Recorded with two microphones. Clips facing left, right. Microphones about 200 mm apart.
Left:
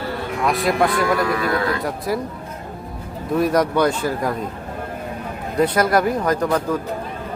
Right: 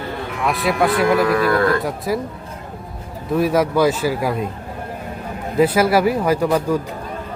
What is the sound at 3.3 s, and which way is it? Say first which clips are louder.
A man's voice: right 1 dB; 5° right (ahead or behind).